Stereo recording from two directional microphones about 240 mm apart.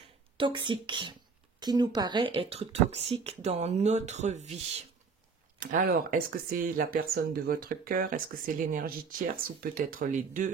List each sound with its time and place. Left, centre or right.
0.4 s speech: centre